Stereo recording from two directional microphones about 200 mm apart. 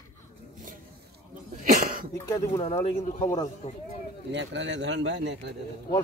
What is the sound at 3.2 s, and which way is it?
Speech, 15° left (ahead or behind).